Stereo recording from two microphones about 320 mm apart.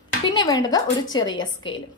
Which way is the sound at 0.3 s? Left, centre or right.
Centre.